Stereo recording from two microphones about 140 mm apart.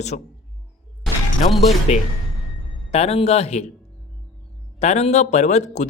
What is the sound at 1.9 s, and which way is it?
Speech, 50° left (ahead or behind).